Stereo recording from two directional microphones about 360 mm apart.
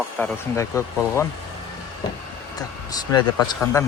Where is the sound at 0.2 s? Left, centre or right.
Centre.